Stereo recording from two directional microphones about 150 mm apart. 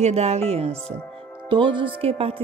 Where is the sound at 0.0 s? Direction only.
45° right (ahead or behind).